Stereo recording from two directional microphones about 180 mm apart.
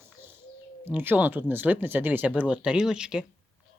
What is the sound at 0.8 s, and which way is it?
Speech, 10° right (ahead or behind).